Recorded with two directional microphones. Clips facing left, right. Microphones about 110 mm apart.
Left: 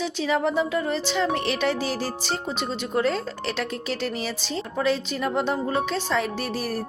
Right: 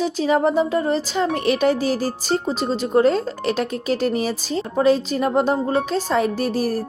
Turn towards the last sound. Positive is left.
turn(degrees=-40)  # may be behind; listen again after turning